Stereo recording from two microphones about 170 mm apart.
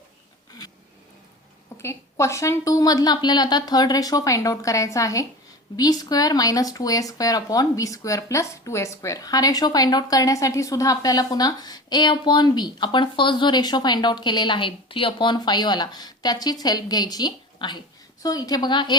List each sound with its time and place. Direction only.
1.8 s a woman's voice: 15° left (ahead or behind)